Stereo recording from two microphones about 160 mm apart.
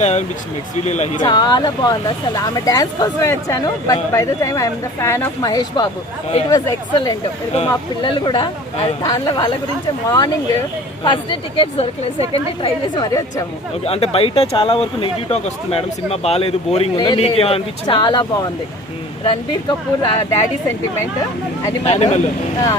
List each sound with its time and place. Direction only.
0.0 s speech: 45° left (ahead or behind)
1.2 s speech: 25° left (ahead or behind)
21.8 s speech: 45° left (ahead or behind)